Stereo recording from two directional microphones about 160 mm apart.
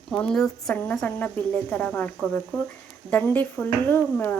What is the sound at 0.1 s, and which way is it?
Speech, 5° left (ahead or behind).